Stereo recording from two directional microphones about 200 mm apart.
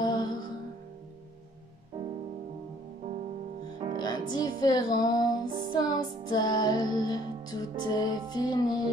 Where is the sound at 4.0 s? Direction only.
20° left (ahead or behind).